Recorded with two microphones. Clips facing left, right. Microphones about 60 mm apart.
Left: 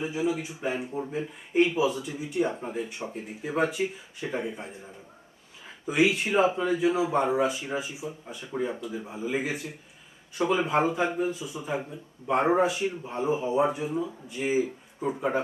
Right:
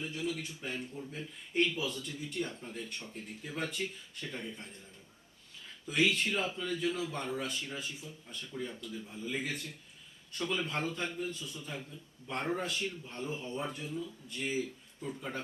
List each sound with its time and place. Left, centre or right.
0.0 s a man's voice: centre
2.5 s a man's voice: left
5.9 s a man's voice: centre